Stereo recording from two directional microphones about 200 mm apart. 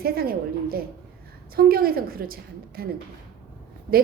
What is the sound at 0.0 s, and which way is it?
A woman's voice, 50° right (ahead or behind).